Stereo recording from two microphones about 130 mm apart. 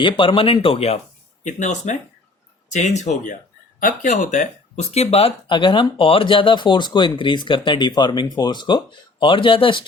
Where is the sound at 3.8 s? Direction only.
85° left; by 5.3 s 50° left (ahead or behind).